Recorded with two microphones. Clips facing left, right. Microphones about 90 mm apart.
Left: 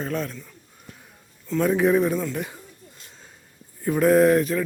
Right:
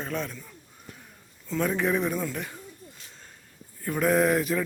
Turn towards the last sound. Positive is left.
turn(degrees=-5)  # may be behind; listen again after turning